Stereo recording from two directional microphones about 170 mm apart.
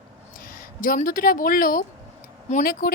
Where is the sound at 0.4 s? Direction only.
60° left (ahead or behind).